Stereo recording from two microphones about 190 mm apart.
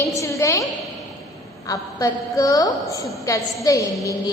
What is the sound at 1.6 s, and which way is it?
A woman's voice, 15° left (ahead or behind).